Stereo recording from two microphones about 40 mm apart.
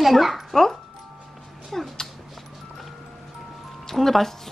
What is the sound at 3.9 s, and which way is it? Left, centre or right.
Speech, centre.